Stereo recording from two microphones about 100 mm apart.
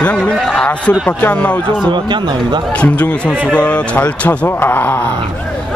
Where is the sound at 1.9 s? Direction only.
50° right (ahead or behind).